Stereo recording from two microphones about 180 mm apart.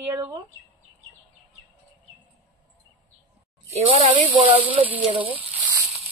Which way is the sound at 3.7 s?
35° right (ahead or behind).